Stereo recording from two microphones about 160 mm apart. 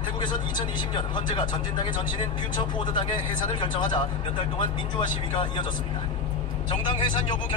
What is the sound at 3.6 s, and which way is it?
Speech, 30° left (ahead or behind).